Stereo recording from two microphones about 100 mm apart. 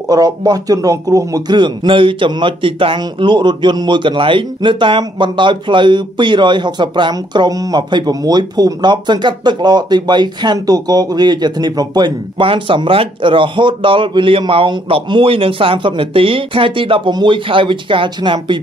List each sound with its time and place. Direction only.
0.1 s a man's voice: 40° right (ahead or behind)
1.6 s a man's voice: 55° right (ahead or behind)